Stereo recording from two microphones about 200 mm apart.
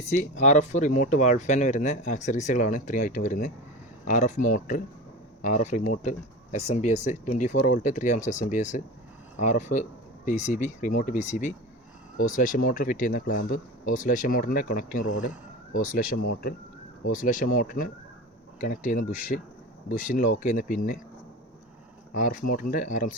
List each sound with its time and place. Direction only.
0.0 s speech: 35° left (ahead or behind)
20.6 s speech: 45° left (ahead or behind)
22.1 s speech: 40° left (ahead or behind)